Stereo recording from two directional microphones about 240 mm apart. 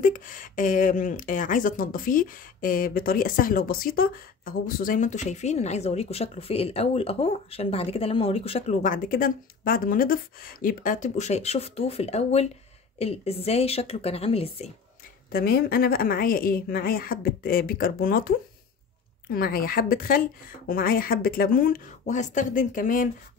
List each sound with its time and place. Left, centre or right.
0.0 s a woman's voice: left
15.3 s speech: left
19.3 s speech: left